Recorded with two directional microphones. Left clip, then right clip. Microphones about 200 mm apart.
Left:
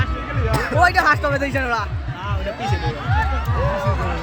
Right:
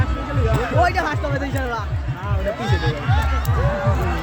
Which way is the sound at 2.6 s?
40° right (ahead or behind).